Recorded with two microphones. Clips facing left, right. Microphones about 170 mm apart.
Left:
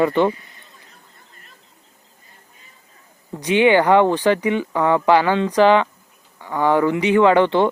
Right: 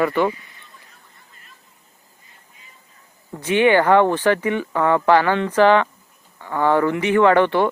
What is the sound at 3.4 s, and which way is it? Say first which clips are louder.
Speech: left 1 dB; 15° left (ahead or behind).